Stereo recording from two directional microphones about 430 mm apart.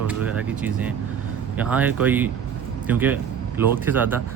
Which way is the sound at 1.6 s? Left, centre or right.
Centre.